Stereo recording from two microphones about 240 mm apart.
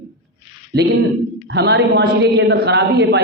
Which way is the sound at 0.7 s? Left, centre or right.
Right.